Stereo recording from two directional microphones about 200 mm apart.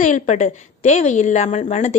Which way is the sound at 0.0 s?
40° left (ahead or behind).